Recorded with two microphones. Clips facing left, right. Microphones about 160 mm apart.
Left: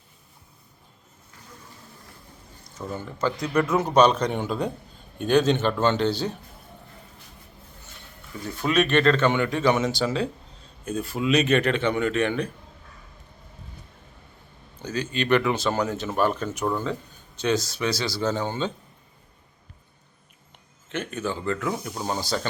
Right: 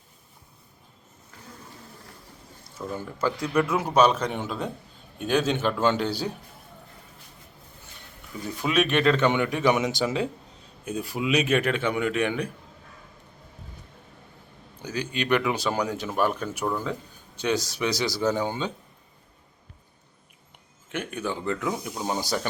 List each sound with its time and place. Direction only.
2.7 s speech: 5° right (ahead or behind)
8.4 s speech: 5° right (ahead or behind)
14.8 s speech: 15° right (ahead or behind)
20.9 s speech: 10° right (ahead or behind)